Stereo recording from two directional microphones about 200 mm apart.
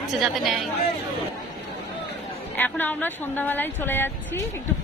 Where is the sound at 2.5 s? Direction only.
10° left (ahead or behind).